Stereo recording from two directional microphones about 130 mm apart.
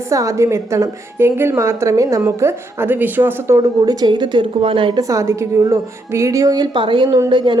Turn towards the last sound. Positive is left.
turn(degrees=-35)  # may be behind; listen again after turning